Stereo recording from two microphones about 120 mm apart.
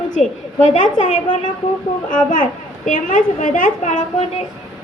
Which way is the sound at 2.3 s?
90° left.